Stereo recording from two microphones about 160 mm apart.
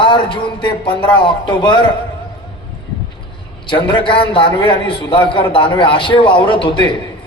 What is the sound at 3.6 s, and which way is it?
A man's voice, 30° left (ahead or behind).